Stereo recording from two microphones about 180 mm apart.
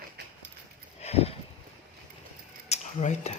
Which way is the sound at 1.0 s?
35° left (ahead or behind).